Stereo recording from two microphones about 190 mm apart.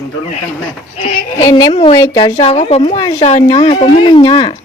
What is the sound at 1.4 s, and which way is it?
Speech, 20° left (ahead or behind).